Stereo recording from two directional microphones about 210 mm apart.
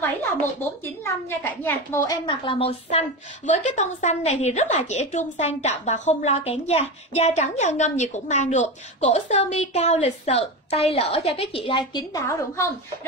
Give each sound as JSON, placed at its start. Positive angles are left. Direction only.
{"t": 1.0, "sound": "a woman's voice", "side_deg": 10}